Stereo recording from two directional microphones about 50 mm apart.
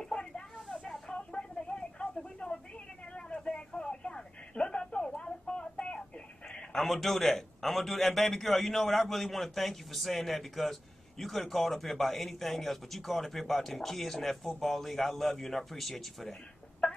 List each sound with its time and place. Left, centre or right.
0.0 s a sound: centre
3.3 s telephone: centre
6.8 s a man's voice: centre